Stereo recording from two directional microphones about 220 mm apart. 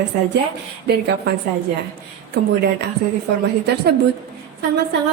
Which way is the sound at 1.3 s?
45° right (ahead or behind).